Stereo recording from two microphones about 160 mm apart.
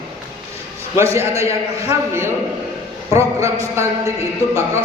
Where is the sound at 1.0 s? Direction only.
15° right (ahead or behind).